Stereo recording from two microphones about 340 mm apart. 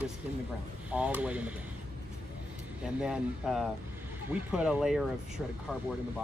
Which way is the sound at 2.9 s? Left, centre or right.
Centre.